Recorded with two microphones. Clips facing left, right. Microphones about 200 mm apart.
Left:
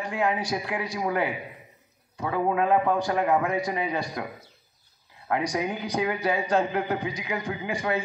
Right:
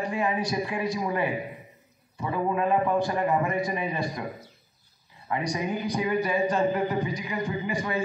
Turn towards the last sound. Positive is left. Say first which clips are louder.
# left 1 dB
turn(degrees=90)